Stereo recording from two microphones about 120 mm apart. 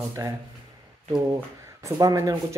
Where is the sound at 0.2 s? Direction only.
30° right (ahead or behind).